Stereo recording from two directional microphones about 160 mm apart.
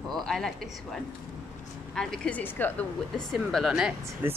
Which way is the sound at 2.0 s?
5° left (ahead or behind).